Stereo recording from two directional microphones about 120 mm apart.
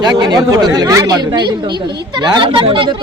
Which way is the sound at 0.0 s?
35° right (ahead or behind).